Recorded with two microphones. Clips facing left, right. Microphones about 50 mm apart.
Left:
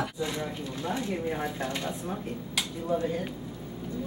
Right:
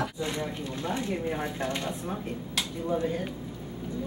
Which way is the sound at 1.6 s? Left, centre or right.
Right.